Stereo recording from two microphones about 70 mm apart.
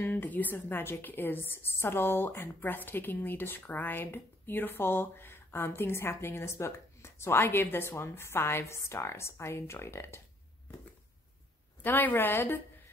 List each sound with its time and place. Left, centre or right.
0.0 s a woman's voice: left
11.8 s a woman's voice: left